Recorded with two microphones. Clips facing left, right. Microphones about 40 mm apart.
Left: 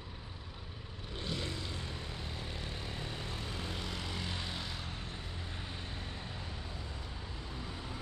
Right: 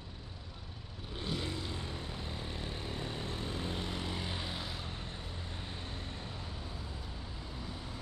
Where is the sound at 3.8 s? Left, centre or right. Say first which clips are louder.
Right 2 dB; right; by 4.8 s centre.